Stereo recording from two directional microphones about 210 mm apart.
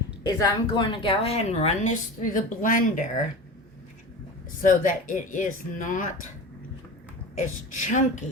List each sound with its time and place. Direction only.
0.2 s a woman's voice: 20° left (ahead or behind); by 3.1 s 40° left (ahead or behind)
4.6 s a woman's voice: 40° left (ahead or behind)
7.3 s a woman's voice: 35° left (ahead or behind)